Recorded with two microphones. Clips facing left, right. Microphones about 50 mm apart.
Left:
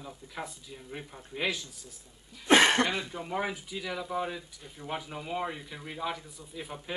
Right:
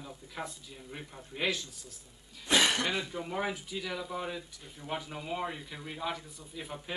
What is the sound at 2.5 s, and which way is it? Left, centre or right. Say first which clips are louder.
Speech: left 6 dB; left.